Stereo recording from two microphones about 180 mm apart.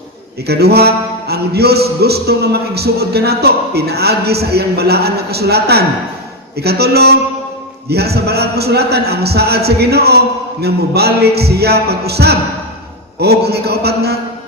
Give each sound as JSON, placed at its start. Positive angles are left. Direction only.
{"t": 0.4, "sound": "music", "side_deg": -65}